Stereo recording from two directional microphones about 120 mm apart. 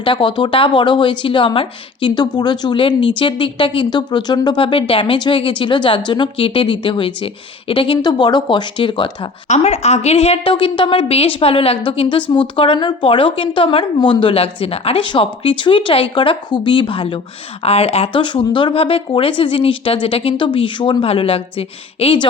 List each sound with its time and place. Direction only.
0.0 s speech: 45° left (ahead or behind)
9.5 s a woman's voice: 65° left (ahead or behind); by 22.3 s 50° left (ahead or behind)